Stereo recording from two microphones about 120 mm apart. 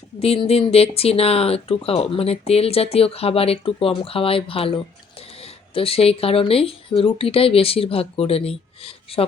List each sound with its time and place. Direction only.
0.2 s speech: 55° left (ahead or behind)
5.7 s speech: 55° left (ahead or behind)